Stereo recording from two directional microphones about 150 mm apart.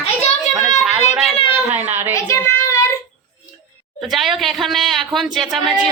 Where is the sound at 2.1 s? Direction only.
20° left (ahead or behind).